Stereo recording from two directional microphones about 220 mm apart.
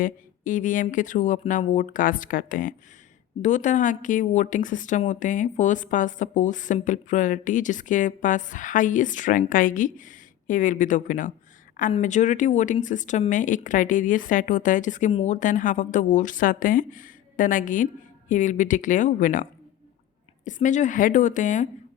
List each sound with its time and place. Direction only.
0.0 s a woman's voice: 35° left (ahead or behind)